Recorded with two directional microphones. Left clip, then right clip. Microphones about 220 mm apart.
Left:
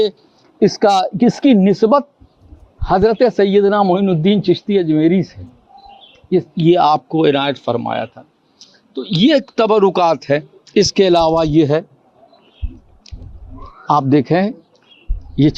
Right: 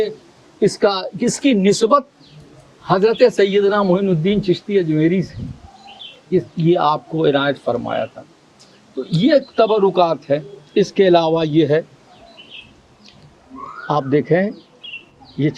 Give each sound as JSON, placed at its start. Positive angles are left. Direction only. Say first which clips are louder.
{"t": 0.6, "sound": "a man's voice", "louder": "left 4 dB", "side_deg": 40}
{"t": 6.3, "sound": "a man's voice", "louder": "left 4 dB", "side_deg": 50}
{"t": 13.8, "sound": "speech", "louder": "left 4 dB", "side_deg": 30}